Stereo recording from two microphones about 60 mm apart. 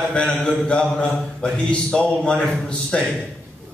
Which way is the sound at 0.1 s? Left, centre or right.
Centre.